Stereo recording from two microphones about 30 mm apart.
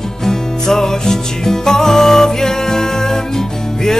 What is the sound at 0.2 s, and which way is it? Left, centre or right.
Music, centre.